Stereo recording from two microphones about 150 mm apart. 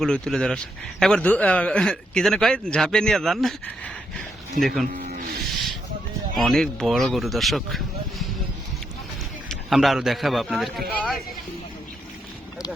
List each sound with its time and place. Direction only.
0.0 s a man's voice: 5° left (ahead or behind)
6.3 s a man's voice: centre (ahead or behind)
9.5 s a man's voice: centre (ahead or behind)